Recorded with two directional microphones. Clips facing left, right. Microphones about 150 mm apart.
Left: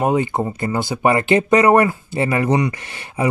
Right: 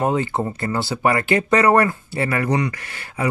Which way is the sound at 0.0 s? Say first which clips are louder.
Left 2 dB; 15° left (ahead or behind).